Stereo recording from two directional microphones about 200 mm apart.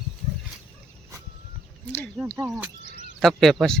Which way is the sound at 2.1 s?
10° right (ahead or behind).